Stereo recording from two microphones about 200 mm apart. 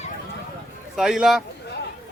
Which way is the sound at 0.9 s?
Centre (ahead or behind).